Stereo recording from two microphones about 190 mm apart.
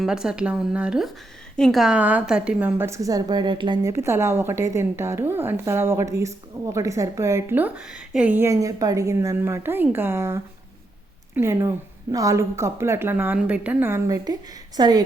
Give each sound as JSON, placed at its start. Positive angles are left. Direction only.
{"t": 0.0, "sound": "a woman's voice", "side_deg": -5}